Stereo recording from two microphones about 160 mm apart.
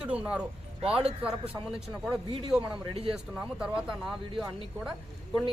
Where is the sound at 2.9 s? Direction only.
40° right (ahead or behind).